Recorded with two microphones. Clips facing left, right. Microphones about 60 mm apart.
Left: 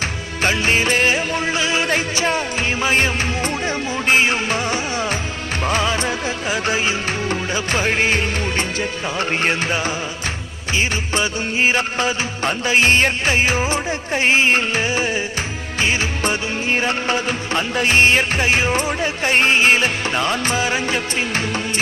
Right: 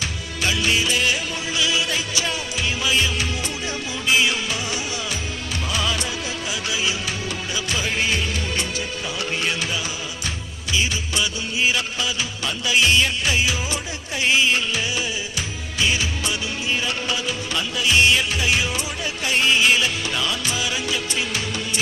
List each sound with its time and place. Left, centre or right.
0.0 s music: left